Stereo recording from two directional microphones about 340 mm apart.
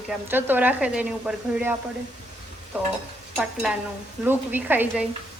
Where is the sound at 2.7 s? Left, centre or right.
Centre.